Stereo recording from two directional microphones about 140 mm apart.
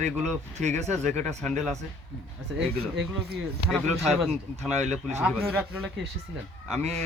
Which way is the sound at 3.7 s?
Centre (ahead or behind).